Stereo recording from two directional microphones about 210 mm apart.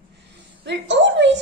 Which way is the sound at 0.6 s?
60° right (ahead or behind).